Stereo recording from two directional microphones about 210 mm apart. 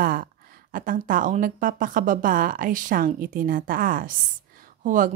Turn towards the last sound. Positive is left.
turn(degrees=-40)  # may be behind; listen again after turning